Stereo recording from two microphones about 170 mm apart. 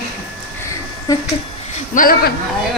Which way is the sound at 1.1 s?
20° left (ahead or behind).